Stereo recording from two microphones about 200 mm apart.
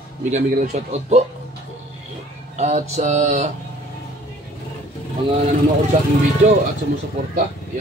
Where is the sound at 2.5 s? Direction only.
35° right (ahead or behind).